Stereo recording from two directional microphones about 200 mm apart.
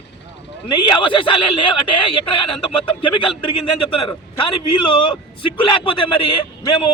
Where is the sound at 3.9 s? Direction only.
25° left (ahead or behind).